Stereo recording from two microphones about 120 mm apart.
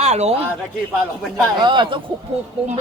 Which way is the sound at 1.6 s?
40° right (ahead or behind).